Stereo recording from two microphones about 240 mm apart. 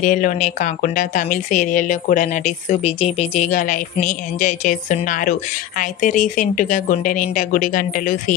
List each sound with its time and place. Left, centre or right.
0.0 s a woman's voice: left